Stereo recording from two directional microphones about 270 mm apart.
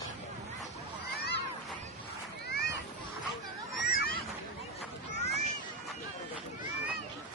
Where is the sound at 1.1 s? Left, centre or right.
Left.